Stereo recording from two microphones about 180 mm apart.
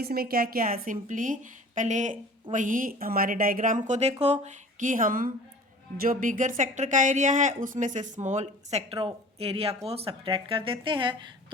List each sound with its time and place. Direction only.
0.0 s a woman's voice: 55° right (ahead or behind); by 11.3 s 25° right (ahead or behind)